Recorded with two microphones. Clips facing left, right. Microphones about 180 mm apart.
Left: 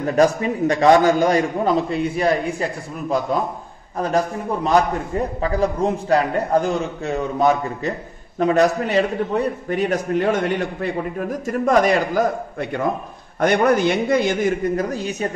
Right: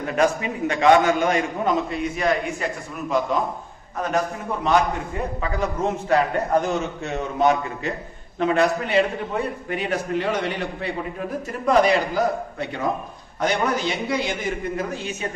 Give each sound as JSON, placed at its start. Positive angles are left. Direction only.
{"t": 0.0, "sound": "a man's voice", "side_deg": 35}
{"t": 5.4, "sound": "a man's voice", "side_deg": 35}